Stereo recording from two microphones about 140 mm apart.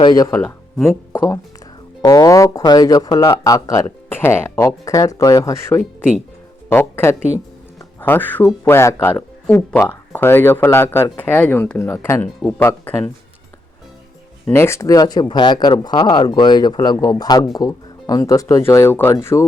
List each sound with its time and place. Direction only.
0.0 s speech: 30° left (ahead or behind)
0.3 s speech: 10° left (ahead or behind)
14.4 s speech: 20° left (ahead or behind)